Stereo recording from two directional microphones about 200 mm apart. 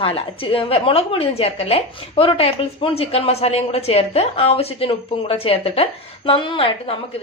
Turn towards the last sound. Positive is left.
turn(degrees=25)  # may be behind; listen again after turning